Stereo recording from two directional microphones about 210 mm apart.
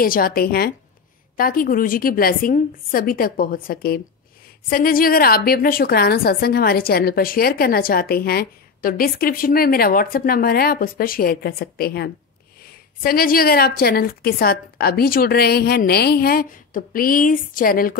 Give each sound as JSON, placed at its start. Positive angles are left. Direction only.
{"t": 0.0, "sound": "a woman's voice", "side_deg": 45}